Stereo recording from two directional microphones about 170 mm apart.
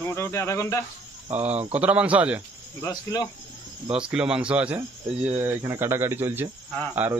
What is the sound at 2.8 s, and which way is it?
Speech, 20° left (ahead or behind).